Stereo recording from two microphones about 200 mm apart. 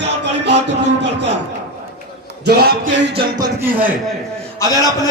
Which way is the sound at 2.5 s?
50° right (ahead or behind).